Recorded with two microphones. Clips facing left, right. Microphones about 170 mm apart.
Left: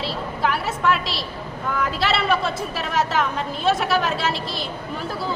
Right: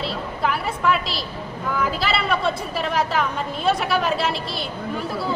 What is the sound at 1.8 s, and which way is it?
A woman's voice, centre (ahead or behind).